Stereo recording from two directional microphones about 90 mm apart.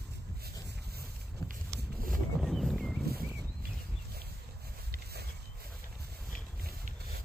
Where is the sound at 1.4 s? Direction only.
35° left (ahead or behind).